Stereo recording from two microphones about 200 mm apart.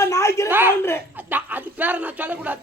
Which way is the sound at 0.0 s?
15° left (ahead or behind).